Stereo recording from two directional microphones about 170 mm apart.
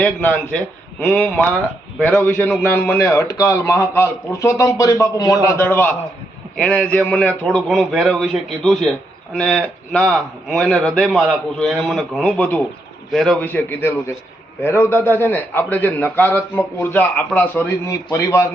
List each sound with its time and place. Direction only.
0.0 s a man's voice: 10° left (ahead or behind)